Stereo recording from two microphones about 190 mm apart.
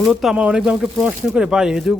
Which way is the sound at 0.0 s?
Centre (ahead or behind).